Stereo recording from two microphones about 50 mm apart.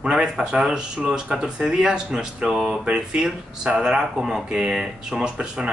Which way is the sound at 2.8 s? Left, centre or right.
Centre.